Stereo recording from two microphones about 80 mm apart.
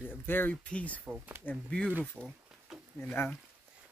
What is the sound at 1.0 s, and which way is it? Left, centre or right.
Speech, centre.